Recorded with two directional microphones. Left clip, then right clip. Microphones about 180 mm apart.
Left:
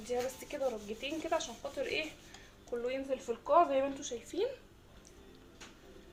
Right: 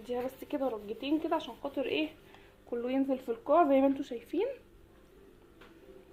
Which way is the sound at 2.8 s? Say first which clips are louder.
Right 4 dB; 50° right (ahead or behind).